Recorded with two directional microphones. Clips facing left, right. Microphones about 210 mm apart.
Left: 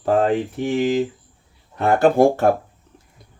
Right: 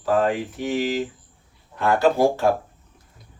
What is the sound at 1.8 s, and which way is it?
Speech, 55° left (ahead or behind).